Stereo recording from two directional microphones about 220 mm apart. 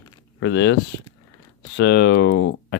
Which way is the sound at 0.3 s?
55° left (ahead or behind).